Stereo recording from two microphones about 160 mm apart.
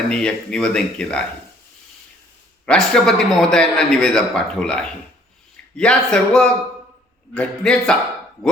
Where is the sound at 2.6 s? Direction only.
5° left (ahead or behind).